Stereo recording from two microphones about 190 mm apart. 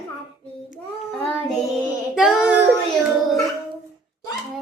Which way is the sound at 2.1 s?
Centre (ahead or behind).